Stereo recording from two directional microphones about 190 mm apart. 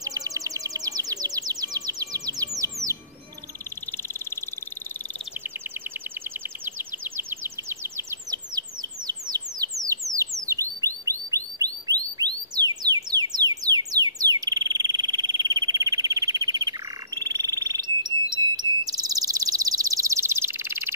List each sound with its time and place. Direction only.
0.0 s music: 20° right (ahead or behind)
7.2 s bird: 10° right (ahead or behind)